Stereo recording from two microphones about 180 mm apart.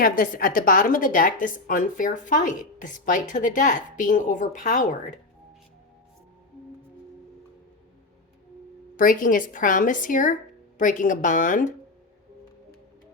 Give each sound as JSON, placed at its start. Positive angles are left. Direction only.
{"t": 0.0, "sound": "a woman's voice", "side_deg": 55}
{"t": 9.0, "sound": "a woman's voice", "side_deg": 50}